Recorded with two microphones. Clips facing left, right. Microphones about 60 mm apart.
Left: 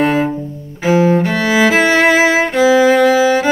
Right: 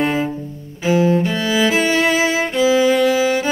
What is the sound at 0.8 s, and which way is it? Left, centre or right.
Music, left.